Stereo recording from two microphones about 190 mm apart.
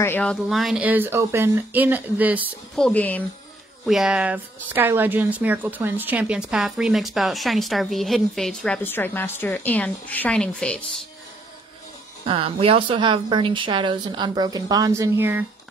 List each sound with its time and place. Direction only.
0.0 s speech: 10° left (ahead or behind); by 2.8 s 10° right (ahead or behind)
2.8 s speech: 10° left (ahead or behind)
12.3 s a woman's voice: 30° right (ahead or behind); by 15.4 s 10° right (ahead or behind)